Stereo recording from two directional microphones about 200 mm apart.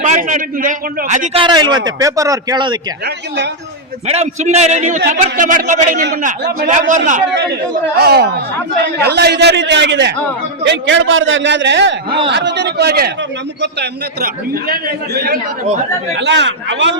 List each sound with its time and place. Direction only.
0.0 s a man's voice: 40° right (ahead or behind); by 2.7 s 20° right (ahead or behind)
4.0 s a man's voice: 30° right (ahead or behind)
7.9 s a man's voice: 55° right (ahead or behind)
16.1 s a man's voice: 60° right (ahead or behind)